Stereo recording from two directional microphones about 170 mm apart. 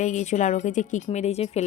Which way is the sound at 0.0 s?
45° left (ahead or behind).